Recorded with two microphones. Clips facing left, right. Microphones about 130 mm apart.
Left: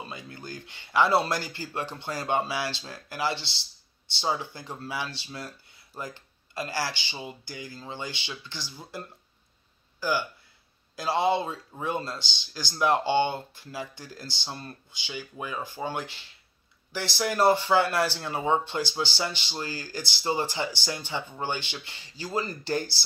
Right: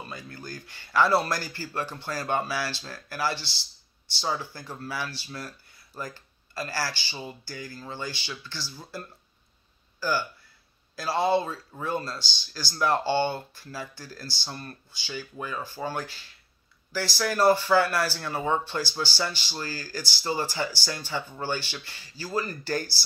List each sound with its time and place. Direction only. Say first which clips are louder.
0.0 s speech: even; 20° left (ahead or behind)